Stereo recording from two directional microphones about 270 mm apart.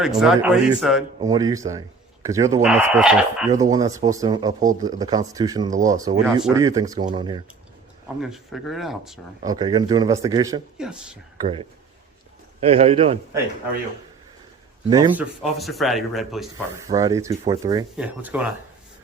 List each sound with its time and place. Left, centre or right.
0.0 s speech: centre
1.2 s speech: centre
8.0 s speech: centre
9.4 s speech: centre
11.3 s a man's voice: centre
14.8 s speech: centre
16.9 s speech: centre